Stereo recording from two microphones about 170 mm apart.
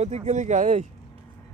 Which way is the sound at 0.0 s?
40° right (ahead or behind).